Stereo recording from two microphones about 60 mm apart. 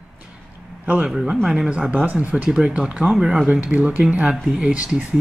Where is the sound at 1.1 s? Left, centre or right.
Centre.